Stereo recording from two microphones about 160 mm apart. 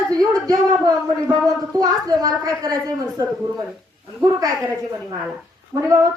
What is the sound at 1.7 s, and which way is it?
A man's voice, 20° right (ahead or behind).